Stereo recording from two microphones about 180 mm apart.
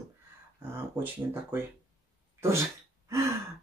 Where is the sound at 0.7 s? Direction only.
10° right (ahead or behind).